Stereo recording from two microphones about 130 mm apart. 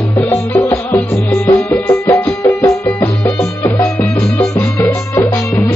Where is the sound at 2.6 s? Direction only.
20° left (ahead or behind).